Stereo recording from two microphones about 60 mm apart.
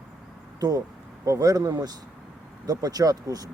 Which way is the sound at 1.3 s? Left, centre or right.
Right.